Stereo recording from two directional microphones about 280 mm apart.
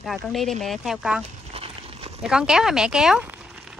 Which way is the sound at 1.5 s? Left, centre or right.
Right.